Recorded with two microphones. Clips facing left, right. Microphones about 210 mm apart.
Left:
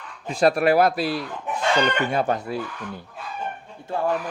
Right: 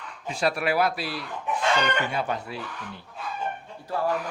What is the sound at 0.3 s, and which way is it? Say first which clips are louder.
Speech: left 7 dB; 45° left (ahead or behind).